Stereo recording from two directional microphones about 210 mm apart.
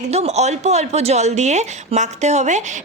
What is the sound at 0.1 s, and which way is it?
A woman's voice, 30° right (ahead or behind).